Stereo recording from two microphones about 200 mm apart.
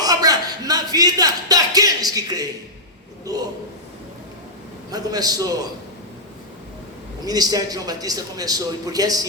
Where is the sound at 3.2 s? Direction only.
20° right (ahead or behind).